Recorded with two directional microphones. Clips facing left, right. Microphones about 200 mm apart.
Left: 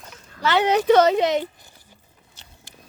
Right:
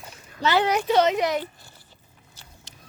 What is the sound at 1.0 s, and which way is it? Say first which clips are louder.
Speech: left 4 dB; 30° left (ahead or behind).